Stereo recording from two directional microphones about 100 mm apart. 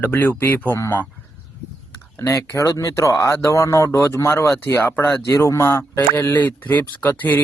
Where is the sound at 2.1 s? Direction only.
35° left (ahead or behind).